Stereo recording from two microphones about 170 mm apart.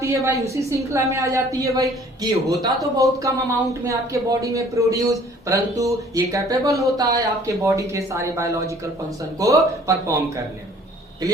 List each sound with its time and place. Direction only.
0.0 s a woman's voice: 15° right (ahead or behind)